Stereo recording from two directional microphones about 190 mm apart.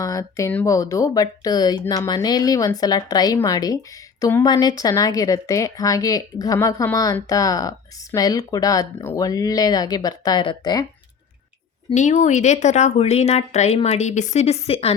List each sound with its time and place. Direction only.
0.0 s a woman's voice: 20° left (ahead or behind)
11.9 s a woman's voice: 40° left (ahead or behind)